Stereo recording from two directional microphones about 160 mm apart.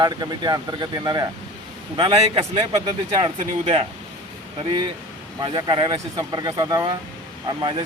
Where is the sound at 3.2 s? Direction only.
35° right (ahead or behind).